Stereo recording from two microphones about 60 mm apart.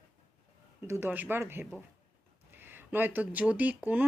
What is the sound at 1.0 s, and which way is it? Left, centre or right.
Speech, right.